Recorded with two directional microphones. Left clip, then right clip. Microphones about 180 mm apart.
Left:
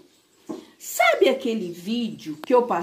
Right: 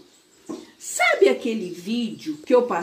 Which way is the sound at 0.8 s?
35° left (ahead or behind).